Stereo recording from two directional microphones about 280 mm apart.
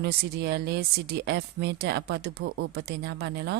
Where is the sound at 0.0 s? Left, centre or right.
Right.